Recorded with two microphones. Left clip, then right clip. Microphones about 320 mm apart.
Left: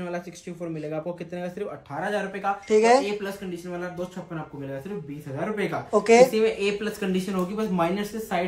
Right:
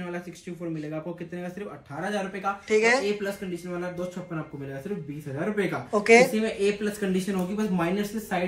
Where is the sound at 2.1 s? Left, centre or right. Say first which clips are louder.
Left 2 dB; centre.